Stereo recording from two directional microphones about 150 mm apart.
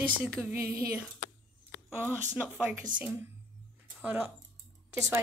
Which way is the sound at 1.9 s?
15° right (ahead or behind).